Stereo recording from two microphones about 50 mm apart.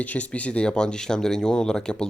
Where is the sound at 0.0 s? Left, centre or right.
Left.